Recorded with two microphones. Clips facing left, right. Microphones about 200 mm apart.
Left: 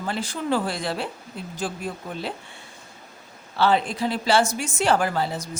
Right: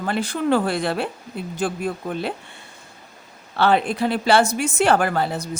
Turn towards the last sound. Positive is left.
turn(degrees=-60)  # may be behind; listen again after turning